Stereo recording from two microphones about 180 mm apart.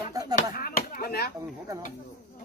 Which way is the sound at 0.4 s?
50° left (ahead or behind).